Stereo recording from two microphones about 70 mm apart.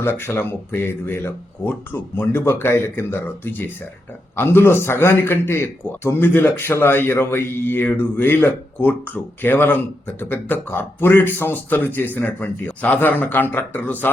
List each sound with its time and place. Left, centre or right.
0.0 s a man's voice: left